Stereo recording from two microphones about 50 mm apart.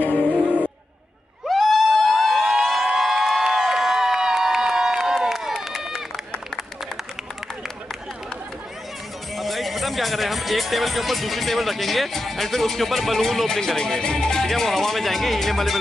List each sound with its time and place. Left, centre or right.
0.1 s music: right
1.5 s cheering: centre
5.7 s run: centre
9.4 s speech: centre